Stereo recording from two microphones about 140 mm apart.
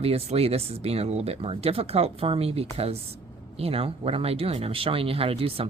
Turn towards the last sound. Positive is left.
turn(degrees=-45)  # may be behind; listen again after turning